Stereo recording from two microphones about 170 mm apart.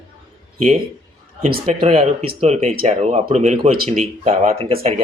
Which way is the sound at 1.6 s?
35° right (ahead or behind).